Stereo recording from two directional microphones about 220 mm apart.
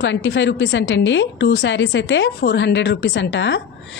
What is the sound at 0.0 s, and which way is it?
A woman's voice, 55° left (ahead or behind).